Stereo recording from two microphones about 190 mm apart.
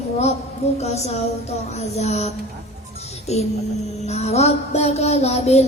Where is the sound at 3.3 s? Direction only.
35° left (ahead or behind).